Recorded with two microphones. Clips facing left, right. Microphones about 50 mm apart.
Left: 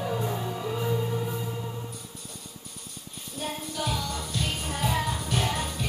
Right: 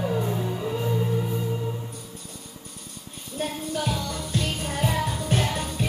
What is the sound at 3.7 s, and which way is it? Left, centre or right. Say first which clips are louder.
Music: right 2 dB; right.